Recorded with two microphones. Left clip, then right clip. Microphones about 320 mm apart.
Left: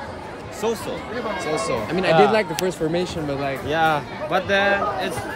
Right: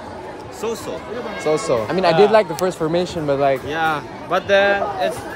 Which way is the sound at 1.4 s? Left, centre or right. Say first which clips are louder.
Right 8 dB; right.